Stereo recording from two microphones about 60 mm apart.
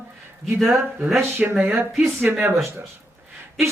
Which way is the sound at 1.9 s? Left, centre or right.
Centre.